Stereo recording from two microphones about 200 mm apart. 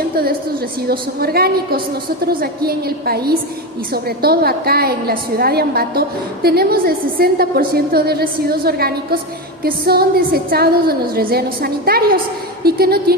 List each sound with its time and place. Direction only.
0.9 s a woman's voice: 50° right (ahead or behind)